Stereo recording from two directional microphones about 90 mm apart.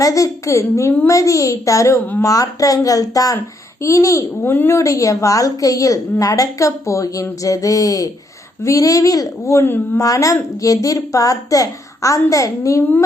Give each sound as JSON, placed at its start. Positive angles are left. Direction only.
{"t": 0.0, "sound": "a woman's voice", "side_deg": 40}
{"t": 4.5, "sound": "speech", "side_deg": 25}
{"t": 4.8, "sound": "a woman's voice", "side_deg": 35}
{"t": 9.6, "sound": "speech", "side_deg": 20}
{"t": 10.0, "sound": "a woman's voice", "side_deg": 40}